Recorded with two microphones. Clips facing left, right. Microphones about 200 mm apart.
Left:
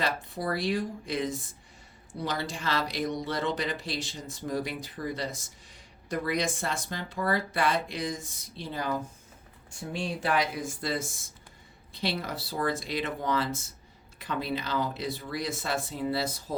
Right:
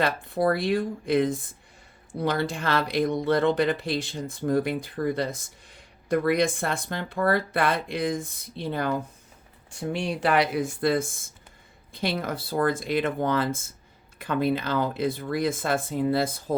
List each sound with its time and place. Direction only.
0.0 s speech: 55° right (ahead or behind)
9.6 s speech: 70° right (ahead or behind); by 16.6 s 50° right (ahead or behind)